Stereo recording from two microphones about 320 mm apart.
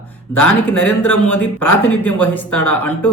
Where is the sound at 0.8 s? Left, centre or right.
Left.